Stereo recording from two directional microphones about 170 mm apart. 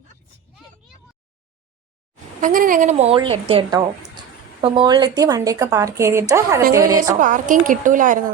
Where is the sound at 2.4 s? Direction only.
50° right (ahead or behind); by 7.1 s 20° right (ahead or behind).